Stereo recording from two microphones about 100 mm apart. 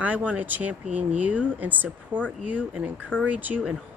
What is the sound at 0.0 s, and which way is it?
Speech, 15° right (ahead or behind).